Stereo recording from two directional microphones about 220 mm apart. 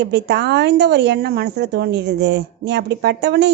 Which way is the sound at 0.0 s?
50° right (ahead or behind).